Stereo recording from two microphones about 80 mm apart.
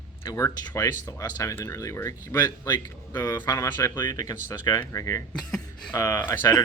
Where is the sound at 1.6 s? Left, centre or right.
Left.